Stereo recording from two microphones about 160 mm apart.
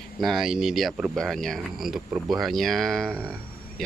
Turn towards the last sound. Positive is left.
turn(degrees=0)  # may be behind; listen again after turning